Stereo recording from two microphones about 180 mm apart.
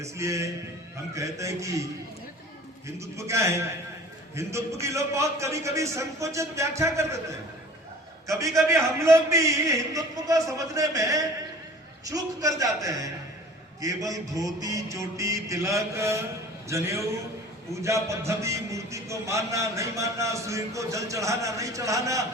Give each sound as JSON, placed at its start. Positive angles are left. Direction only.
{"t": 0.0, "sound": "a man's voice", "side_deg": -15}
{"t": 8.7, "sound": "a man's voice", "side_deg": -15}